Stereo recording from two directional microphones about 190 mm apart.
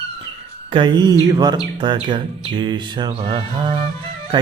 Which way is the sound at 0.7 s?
25° right (ahead or behind).